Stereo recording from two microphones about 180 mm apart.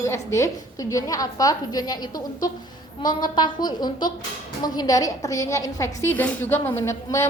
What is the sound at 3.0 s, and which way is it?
A woman's voice, 25° left (ahead or behind).